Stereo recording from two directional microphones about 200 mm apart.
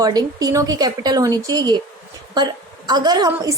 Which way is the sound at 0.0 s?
20° right (ahead or behind).